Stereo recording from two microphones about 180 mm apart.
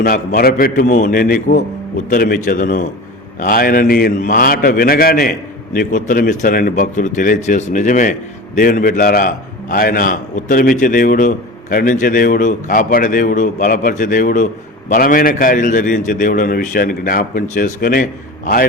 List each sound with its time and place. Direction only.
0.0 s a man's voice: 55° left (ahead or behind)